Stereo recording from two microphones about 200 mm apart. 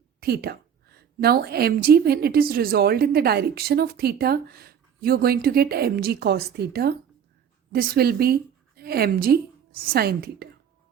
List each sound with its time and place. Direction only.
0.2 s a woman's voice: 50° right (ahead or behind)